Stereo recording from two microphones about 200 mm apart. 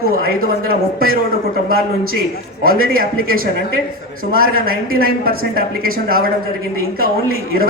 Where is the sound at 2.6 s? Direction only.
45° right (ahead or behind).